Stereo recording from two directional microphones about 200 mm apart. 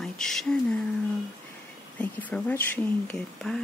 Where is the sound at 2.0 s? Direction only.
5° left (ahead or behind).